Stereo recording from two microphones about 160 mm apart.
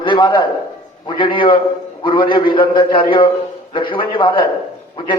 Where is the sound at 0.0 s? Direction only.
30° left (ahead or behind).